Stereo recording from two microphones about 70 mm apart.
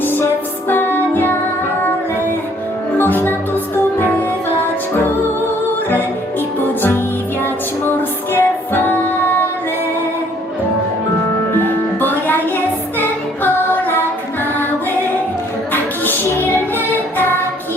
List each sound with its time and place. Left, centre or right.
0.0 s music: left
3.0 s music: left
7.4 s music: left
11.5 s music: left
15.7 s music: left